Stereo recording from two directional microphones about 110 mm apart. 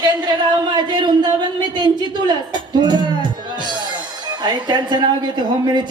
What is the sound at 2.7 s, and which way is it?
Music, 40° right (ahead or behind).